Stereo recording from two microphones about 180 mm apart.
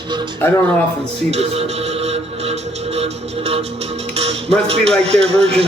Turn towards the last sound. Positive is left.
turn(degrees=-35)  # may be behind; listen again after turning